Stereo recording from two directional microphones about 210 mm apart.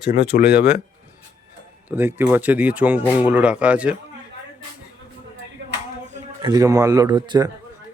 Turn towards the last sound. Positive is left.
turn(degrees=-20)  # may be behind; listen again after turning